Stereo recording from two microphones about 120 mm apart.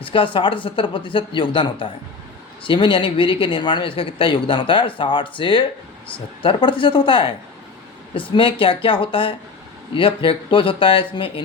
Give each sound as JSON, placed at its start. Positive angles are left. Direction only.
{"t": 0.0, "sound": "speech", "side_deg": 45}
{"t": 8.4, "sound": "speech", "side_deg": 45}